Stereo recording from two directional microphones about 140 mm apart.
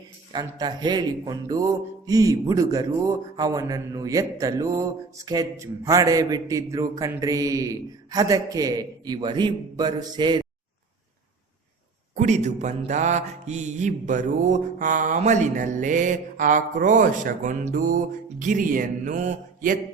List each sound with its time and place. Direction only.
0.3 s a man's voice: 30° right (ahead or behind)
12.1 s mantra: 55° right (ahead or behind)